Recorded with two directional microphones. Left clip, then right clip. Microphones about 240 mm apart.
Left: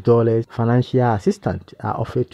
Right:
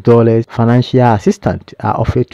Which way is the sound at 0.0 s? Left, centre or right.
Right.